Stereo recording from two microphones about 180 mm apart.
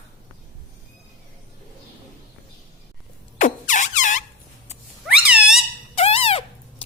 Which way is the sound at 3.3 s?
45° left (ahead or behind).